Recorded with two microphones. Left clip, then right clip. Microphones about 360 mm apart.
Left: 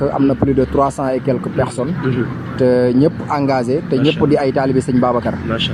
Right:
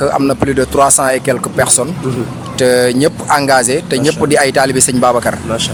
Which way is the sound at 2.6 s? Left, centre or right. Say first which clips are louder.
Right 3 dB; right.